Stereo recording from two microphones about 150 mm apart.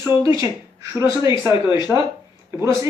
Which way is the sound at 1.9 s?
5° right (ahead or behind).